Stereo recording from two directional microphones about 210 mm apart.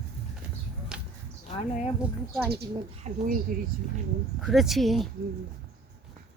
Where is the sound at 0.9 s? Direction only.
5° right (ahead or behind).